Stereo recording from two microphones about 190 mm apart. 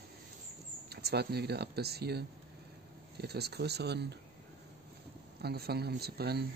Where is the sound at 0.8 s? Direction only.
55° right (ahead or behind).